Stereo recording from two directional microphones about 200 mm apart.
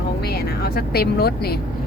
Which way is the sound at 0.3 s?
50° left (ahead or behind).